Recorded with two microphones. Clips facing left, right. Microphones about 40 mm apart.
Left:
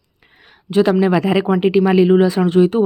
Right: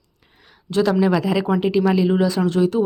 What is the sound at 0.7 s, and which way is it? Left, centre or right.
Speech, left.